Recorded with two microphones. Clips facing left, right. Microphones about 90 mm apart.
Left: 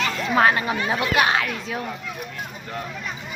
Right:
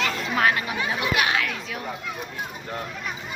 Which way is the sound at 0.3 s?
35° left (ahead or behind).